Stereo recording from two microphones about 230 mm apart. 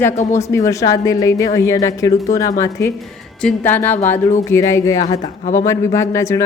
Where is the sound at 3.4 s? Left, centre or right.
Centre.